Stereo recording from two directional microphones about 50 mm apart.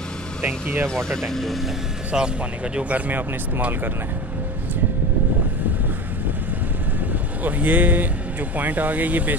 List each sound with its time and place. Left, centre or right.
0.4 s speech: right
0.8 s speech: centre
2.1 s speech: centre; by 3.6 s right
7.4 s speech: right